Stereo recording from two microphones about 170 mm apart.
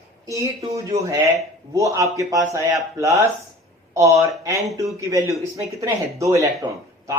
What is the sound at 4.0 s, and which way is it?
A man's voice, 20° right (ahead or behind).